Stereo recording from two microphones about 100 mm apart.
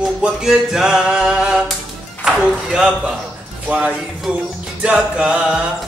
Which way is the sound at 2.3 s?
10° right (ahead or behind).